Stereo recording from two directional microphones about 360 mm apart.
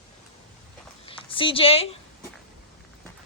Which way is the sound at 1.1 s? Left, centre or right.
Centre.